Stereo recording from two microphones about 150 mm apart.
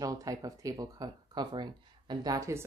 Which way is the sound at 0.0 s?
20° right (ahead or behind).